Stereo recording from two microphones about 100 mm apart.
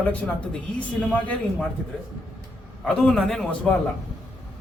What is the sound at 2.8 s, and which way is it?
Speech, 5° left (ahead or behind).